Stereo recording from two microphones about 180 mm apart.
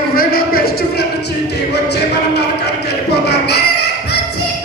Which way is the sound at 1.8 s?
65° left (ahead or behind).